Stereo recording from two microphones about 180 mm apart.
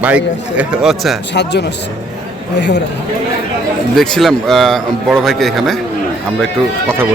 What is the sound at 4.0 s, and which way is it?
Speech, centre (ahead or behind).